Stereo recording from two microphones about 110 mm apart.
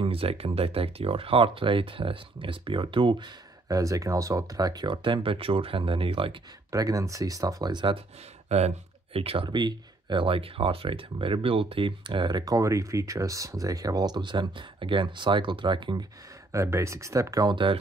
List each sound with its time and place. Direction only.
0.0 s speech: 60° right (ahead or behind)
3.6 s speech: 30° right (ahead or behind); by 6.3 s 55° right (ahead or behind)
6.7 s speech: 30° right (ahead or behind); by 8.0 s 45° right (ahead or behind)
8.5 s speech: 80° right; by 16.1 s 45° right (ahead or behind)
16.5 s speech: 25° right (ahead or behind)